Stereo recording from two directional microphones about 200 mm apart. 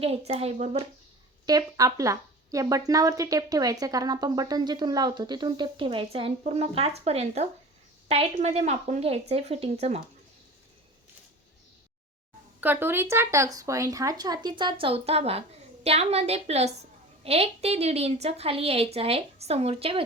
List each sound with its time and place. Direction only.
0.0 s speech: 30° right (ahead or behind)
1.5 s a woman's voice: 20° right (ahead or behind)
12.5 s a woman's voice: 10° right (ahead or behind); by 20.1 s 30° right (ahead or behind)